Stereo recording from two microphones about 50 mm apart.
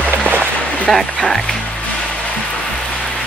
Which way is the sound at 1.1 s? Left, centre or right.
Centre.